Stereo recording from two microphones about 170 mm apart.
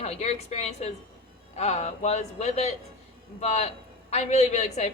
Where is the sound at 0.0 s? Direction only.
40° left (ahead or behind).